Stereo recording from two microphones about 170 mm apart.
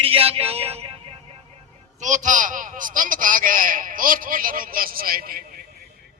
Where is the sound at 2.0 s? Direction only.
45° right (ahead or behind).